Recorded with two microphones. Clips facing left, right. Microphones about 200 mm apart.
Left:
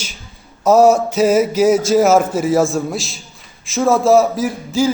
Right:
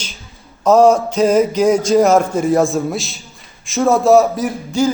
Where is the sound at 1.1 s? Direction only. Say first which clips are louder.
Even; 5° left (ahead or behind).